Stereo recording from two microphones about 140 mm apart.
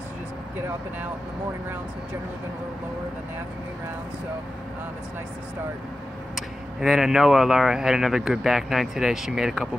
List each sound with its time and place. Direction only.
6.3 s speech: centre (ahead or behind)